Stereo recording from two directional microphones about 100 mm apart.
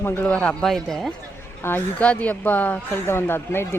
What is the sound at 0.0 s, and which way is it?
A man's voice, 15° left (ahead or behind).